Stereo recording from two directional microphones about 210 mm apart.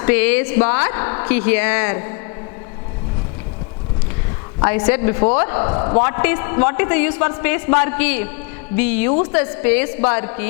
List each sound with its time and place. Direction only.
0.0 s a woman's voice: 15° left (ahead or behind)
4.6 s a woman's voice: 20° left (ahead or behind)